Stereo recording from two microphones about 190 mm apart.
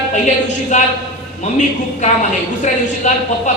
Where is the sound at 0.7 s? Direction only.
35° left (ahead or behind).